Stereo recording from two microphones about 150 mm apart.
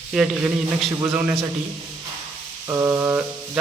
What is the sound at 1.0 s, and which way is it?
Speech, 10° right (ahead or behind).